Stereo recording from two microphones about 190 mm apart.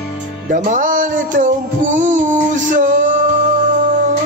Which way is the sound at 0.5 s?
45° right (ahead or behind).